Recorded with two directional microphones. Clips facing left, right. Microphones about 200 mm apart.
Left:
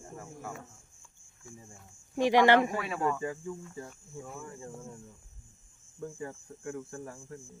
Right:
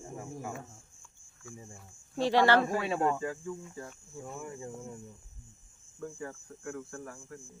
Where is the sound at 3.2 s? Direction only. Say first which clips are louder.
Even; 20° left (ahead or behind).